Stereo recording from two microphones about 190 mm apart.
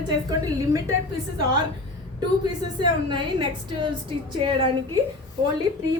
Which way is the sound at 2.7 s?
25° right (ahead or behind).